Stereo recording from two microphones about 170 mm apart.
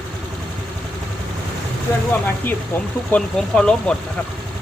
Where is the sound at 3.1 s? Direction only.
5° left (ahead or behind).